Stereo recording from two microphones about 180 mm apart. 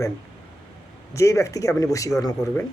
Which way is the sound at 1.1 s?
15° left (ahead or behind).